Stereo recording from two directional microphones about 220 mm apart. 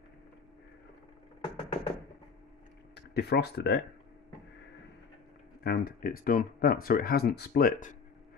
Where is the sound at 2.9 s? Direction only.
50° left (ahead or behind).